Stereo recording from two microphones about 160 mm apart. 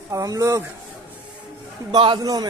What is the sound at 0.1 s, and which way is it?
Speech, 20° right (ahead or behind).